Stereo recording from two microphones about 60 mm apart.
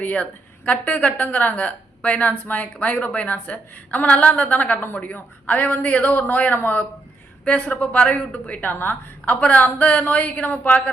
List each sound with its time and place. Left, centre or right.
0.0 s a woman's voice: left